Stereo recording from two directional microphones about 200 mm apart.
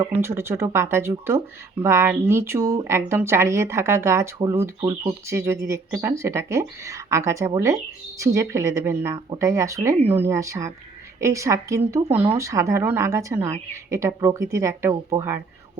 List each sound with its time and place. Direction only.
0.1 s speech: 10° right (ahead or behind)